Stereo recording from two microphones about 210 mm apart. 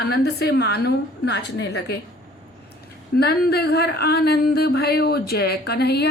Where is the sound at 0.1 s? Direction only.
50° left (ahead or behind).